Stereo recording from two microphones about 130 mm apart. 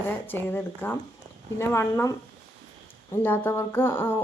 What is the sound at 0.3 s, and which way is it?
A woman's voice, 15° left (ahead or behind).